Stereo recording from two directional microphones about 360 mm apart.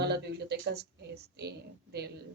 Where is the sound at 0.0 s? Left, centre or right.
Right.